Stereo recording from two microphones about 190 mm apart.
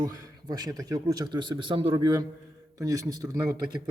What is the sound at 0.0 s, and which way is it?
A man's voice, 20° right (ahead or behind).